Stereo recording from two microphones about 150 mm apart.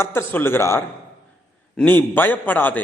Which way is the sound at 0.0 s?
15° left (ahead or behind).